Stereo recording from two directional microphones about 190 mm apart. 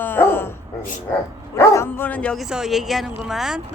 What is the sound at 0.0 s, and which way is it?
Dog, 10° left (ahead or behind).